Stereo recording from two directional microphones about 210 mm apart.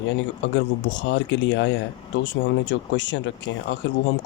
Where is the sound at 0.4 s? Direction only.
60° left (ahead or behind).